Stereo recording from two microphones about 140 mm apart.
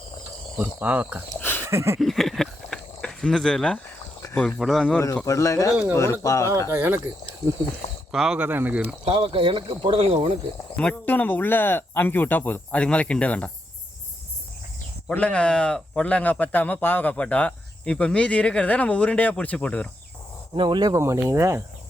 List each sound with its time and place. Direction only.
0.6 s speech: 10° right (ahead or behind)
1.4 s a sound: 15° left (ahead or behind)
1.6 s a sound: 20° right (ahead or behind)
2.0 s a sound: centre (ahead or behind)
4.4 s speech: 5° left (ahead or behind)
5.2 s speech: 20° left (ahead or behind)
6.7 s speech: 15° right (ahead or behind)
8.1 s speech: 5° right (ahead or behind)
9.0 s speech: 40° right (ahead or behind)
10.8 s speech: 10° left (ahead or behind)
15.0 s speech: 10° left (ahead or behind)
20.6 s speech: 30° right (ahead or behind)